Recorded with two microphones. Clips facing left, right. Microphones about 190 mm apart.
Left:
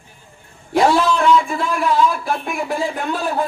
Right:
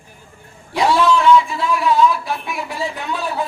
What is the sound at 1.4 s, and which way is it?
Speech, 50° left (ahead or behind).